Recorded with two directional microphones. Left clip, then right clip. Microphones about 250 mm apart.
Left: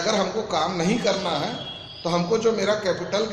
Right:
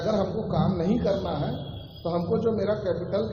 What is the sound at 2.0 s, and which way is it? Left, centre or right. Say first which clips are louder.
A man's voice: left 4 dB; left.